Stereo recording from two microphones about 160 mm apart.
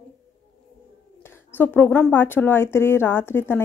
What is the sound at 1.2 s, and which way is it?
A woman's voice, 15° left (ahead or behind).